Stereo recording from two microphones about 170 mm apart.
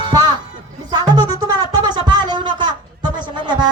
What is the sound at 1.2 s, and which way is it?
A woman's voice, 25° right (ahead or behind).